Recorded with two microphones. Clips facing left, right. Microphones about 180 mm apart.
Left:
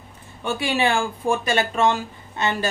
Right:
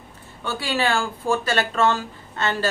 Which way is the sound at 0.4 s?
15° left (ahead or behind).